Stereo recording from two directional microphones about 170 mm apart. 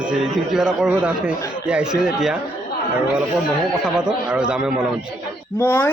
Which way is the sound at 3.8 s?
5° right (ahead or behind).